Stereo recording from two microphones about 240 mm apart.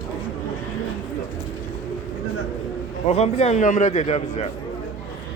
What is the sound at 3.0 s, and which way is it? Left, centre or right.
A man's voice, left.